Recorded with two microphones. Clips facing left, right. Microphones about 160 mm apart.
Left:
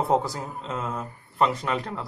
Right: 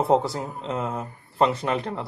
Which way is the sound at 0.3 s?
25° right (ahead or behind).